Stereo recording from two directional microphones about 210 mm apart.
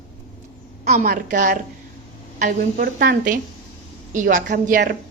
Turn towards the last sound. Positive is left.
turn(degrees=-45)  # may be behind; listen again after turning